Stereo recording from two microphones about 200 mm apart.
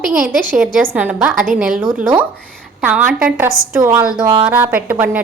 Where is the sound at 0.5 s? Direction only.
5° right (ahead or behind).